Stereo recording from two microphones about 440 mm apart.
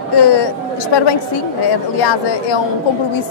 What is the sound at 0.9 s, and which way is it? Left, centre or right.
Speech, left.